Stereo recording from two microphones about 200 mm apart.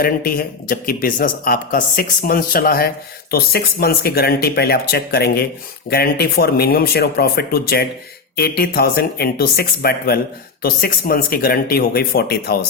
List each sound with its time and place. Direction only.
0.0 s speech: 45° left (ahead or behind)